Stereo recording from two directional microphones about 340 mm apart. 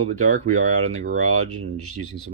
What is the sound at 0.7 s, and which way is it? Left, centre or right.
Speech, right.